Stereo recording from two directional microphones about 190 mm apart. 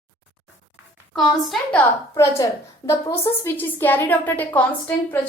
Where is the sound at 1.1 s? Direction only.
5° left (ahead or behind).